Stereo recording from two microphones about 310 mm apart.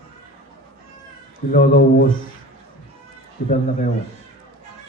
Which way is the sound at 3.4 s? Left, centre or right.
Left.